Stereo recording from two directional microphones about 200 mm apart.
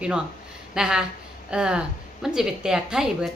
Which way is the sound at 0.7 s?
5° right (ahead or behind).